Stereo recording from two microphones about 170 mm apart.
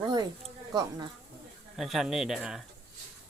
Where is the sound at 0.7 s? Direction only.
25° right (ahead or behind).